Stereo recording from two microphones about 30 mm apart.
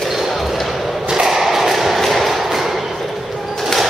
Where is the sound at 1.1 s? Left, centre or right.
Centre.